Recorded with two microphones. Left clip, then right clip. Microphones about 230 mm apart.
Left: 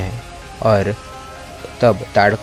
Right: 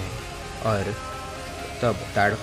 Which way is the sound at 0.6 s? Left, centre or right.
Left.